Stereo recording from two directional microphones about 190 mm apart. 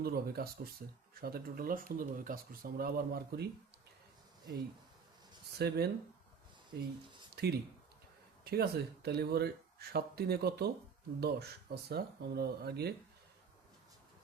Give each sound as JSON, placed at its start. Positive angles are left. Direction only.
{"t": 0.0, "sound": "speech", "side_deg": -55}
{"t": 5.5, "sound": "speech", "side_deg": -55}